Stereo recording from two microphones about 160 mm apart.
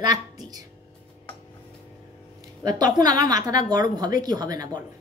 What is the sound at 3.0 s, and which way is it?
Speech, 25° right (ahead or behind).